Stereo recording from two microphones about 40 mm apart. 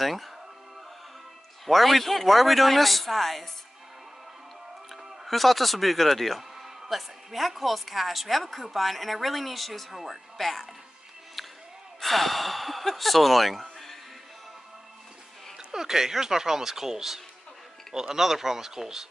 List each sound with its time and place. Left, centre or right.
0.0 s speech: centre
1.7 s speech: centre
5.2 s speech: centre
12.0 s speech: centre
15.5 s speech: centre